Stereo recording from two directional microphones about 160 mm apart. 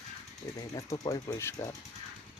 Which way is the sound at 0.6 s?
20° left (ahead or behind).